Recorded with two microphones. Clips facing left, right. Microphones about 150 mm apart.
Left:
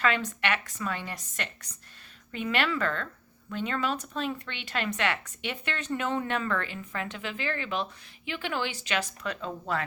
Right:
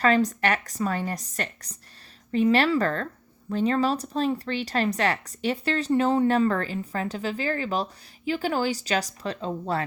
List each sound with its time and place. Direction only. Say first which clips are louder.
0.0 s speech: right 7 dB; 40° right (ahead or behind)